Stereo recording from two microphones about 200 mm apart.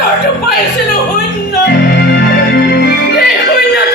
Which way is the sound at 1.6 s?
55° left (ahead or behind).